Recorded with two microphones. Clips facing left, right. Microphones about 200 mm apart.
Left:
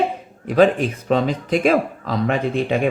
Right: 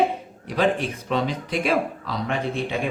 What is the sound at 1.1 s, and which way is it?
Speech, 45° left (ahead or behind).